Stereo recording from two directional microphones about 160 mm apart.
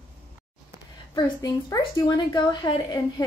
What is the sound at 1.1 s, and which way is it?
A woman's voice, 20° left (ahead or behind).